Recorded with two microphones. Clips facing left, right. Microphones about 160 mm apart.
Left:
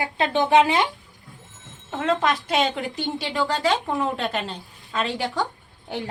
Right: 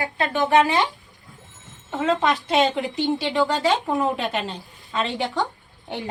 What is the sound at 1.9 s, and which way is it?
Speech, centre (ahead or behind).